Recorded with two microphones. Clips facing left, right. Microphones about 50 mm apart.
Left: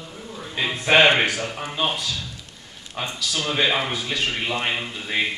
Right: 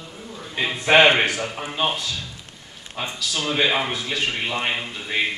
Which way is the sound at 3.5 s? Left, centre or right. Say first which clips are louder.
Right 1 dB; centre.